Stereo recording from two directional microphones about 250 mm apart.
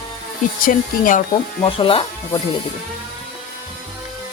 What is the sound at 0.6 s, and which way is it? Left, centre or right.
Speech, left.